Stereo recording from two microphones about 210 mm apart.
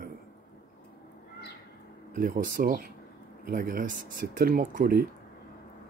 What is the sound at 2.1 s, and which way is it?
Speech, 40° right (ahead or behind).